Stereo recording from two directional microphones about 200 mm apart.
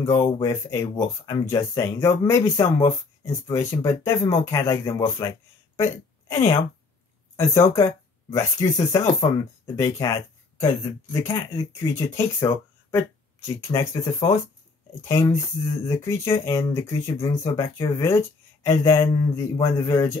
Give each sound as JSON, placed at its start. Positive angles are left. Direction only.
{"t": 0.0, "sound": "a woman's voice", "side_deg": 15}
{"t": 11.2, "sound": "speech", "side_deg": 15}